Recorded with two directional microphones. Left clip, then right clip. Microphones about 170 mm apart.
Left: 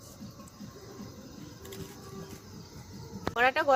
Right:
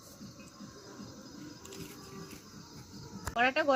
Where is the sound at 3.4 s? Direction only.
50° left (ahead or behind).